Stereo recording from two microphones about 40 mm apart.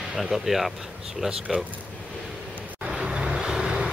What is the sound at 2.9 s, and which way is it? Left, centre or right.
Vehicle, right.